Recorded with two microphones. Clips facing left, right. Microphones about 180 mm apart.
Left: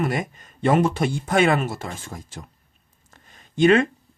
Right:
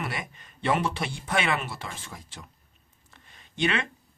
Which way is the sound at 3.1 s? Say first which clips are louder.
Left 9 dB; 45° left (ahead or behind).